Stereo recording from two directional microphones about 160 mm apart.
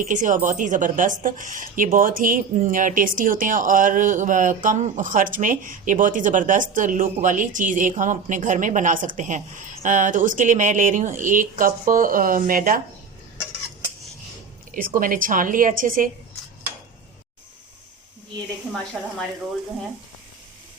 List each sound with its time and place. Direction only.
0.0 s a woman's voice: 55° right (ahead or behind)
14.7 s a woman's voice: 60° right (ahead or behind)